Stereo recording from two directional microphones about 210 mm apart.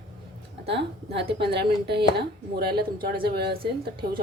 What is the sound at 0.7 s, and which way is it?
A woman's voice, 55° right (ahead or behind).